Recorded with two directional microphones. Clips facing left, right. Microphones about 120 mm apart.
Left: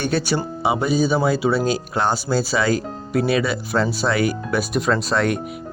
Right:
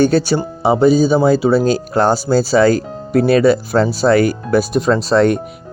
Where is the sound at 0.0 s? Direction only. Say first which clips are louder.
Right 8 dB; 35° right (ahead or behind).